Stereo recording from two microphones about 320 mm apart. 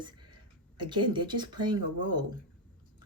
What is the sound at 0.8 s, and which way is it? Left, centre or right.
Speech, centre.